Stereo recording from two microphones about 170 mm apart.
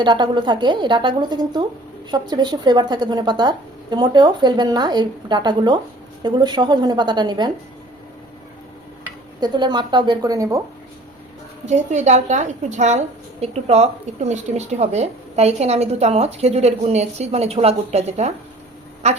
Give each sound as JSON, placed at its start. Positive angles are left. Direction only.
{"t": 0.0, "sound": "speech", "side_deg": -25}
{"t": 9.4, "sound": "speech", "side_deg": -25}
{"t": 11.6, "sound": "a woman's voice", "side_deg": -45}